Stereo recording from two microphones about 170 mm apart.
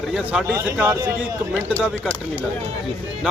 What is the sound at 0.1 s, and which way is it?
Speech, 5° right (ahead or behind).